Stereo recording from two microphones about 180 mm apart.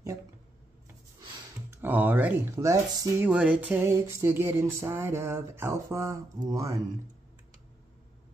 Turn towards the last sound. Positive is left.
turn(degrees=-20)  # may be behind; listen again after turning